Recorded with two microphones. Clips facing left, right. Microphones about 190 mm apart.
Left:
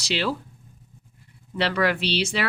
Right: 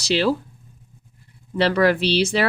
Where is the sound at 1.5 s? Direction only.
40° right (ahead or behind).